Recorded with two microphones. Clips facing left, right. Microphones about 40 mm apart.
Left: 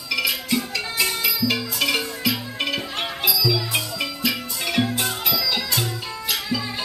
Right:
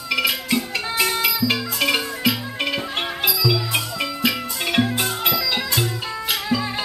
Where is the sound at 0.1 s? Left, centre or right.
Right.